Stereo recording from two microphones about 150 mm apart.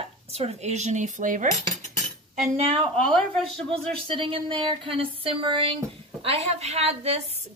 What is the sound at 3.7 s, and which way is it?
A woman's voice, 35° right (ahead or behind).